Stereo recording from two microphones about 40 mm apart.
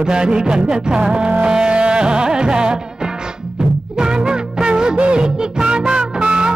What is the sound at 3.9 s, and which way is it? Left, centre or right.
Music, centre.